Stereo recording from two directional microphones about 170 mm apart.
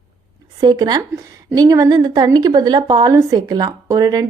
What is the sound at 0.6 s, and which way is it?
A woman's voice, 25° right (ahead or behind).